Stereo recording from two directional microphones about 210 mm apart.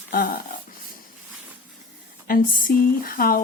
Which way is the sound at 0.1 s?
45° left (ahead or behind).